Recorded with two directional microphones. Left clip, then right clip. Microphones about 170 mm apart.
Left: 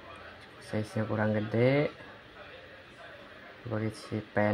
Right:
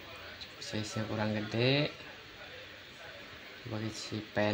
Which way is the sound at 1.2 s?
45° left (ahead or behind).